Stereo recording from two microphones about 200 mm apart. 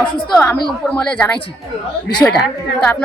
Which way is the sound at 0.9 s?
5° left (ahead or behind).